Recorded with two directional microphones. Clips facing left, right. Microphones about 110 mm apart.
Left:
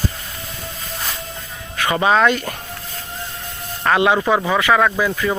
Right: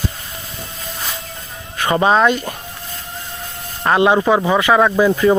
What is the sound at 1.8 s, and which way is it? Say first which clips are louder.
Speech: right 2 dB; 30° right (ahead or behind).